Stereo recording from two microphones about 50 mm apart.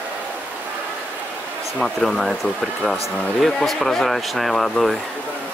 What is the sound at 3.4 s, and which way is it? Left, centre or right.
Speech, centre.